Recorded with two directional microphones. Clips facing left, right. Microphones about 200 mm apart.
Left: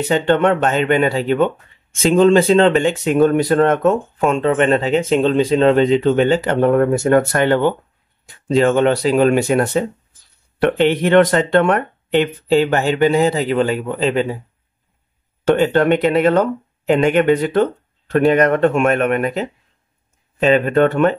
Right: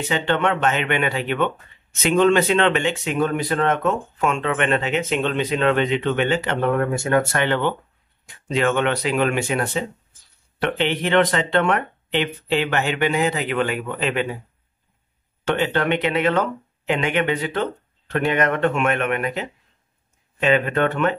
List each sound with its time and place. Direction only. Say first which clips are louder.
0.1 s speech: left 7 dB; 45° left (ahead or behind)
15.4 s speech: left 7 dB; 45° left (ahead or behind)